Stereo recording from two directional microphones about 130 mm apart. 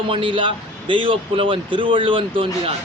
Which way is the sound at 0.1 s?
40° right (ahead or behind).